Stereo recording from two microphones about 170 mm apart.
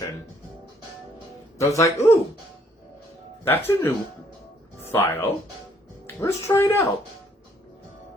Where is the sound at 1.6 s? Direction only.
20° left (ahead or behind).